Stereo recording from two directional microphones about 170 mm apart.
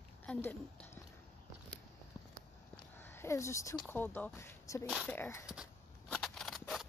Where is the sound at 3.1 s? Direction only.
15° left (ahead or behind).